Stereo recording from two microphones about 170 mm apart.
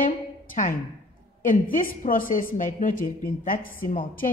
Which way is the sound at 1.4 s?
55° left (ahead or behind).